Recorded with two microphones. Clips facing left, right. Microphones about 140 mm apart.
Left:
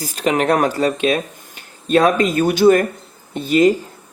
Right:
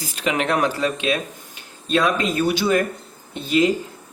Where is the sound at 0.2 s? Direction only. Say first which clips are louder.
Left 5 dB; 40° left (ahead or behind).